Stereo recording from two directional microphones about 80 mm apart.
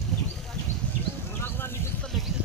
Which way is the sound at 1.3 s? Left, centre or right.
Left.